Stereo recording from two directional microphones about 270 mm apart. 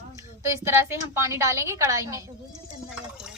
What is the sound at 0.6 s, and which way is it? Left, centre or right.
A woman's voice, centre.